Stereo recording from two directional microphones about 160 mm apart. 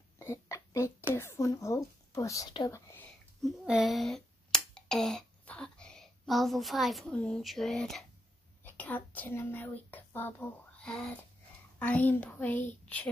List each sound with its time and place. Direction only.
0.2 s a sound: 20° left (ahead or behind)
1.1 s speech: 15° left (ahead or behind)
2.6 s whispering: 15° left (ahead or behind)
3.4 s speech: 5° right (ahead or behind)
12.8 s child singing: 10° left (ahead or behind)